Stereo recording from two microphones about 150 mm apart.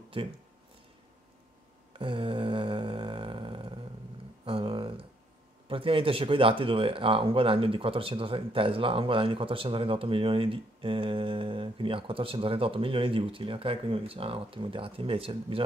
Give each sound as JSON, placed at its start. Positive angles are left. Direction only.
{"t": 0.2, "sound": "speech", "side_deg": -40}
{"t": 2.0, "sound": "a sound", "side_deg": -35}
{"t": 4.5, "sound": "speech", "side_deg": -35}